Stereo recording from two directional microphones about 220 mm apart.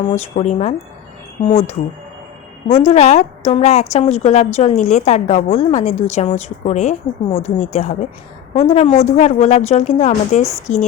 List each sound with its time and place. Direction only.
0.1 s a woman's voice: 30° left (ahead or behind)